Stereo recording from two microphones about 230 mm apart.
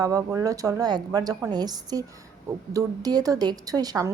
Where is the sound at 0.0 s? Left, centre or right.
Centre.